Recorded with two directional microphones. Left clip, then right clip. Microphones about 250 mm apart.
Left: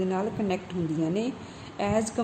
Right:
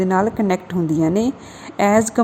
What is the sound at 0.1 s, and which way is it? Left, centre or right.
A woman's voice, right.